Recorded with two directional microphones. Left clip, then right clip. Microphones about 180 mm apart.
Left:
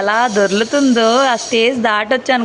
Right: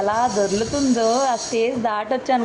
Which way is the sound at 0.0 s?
15° left (ahead or behind).